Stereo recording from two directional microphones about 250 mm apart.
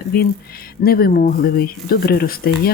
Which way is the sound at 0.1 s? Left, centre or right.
Left.